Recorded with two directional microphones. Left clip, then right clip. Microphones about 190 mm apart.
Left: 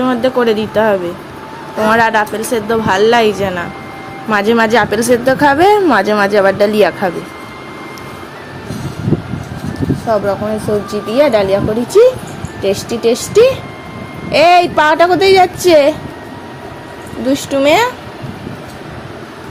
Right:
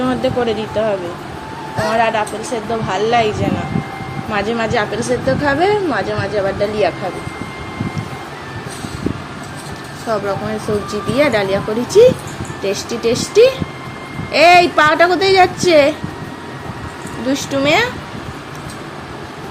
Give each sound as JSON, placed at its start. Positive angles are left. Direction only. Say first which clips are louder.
{"t": 0.0, "sound": "speech", "louder": "left 4 dB", "side_deg": 30}
{"t": 10.1, "sound": "a woman's voice", "louder": "left 4 dB", "side_deg": 20}
{"t": 17.2, "sound": "a woman's voice", "louder": "left 4 dB", "side_deg": 25}